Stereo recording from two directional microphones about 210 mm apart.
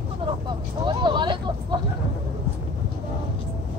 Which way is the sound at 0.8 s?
20° right (ahead or behind).